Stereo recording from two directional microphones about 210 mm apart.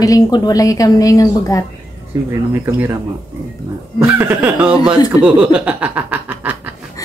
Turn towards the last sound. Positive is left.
turn(degrees=-5)  # may be behind; listen again after turning